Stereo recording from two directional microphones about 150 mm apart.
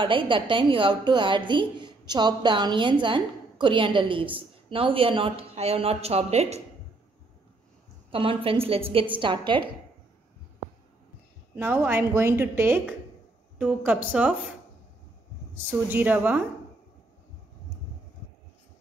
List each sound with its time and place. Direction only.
0.0 s a woman's voice: 35° right (ahead or behind)
8.1 s a woman's voice: 35° right (ahead or behind)
11.5 s a woman's voice: 15° right (ahead or behind)
15.5 s a woman's voice: 15° right (ahead or behind)